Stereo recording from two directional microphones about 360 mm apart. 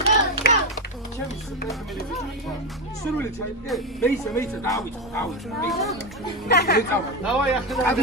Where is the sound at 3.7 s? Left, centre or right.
Centre.